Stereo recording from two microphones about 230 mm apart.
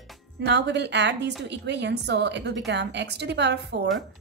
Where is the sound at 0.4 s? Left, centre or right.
Right.